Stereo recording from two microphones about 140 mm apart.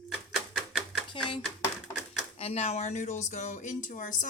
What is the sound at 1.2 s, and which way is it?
Speech, 35° left (ahead or behind).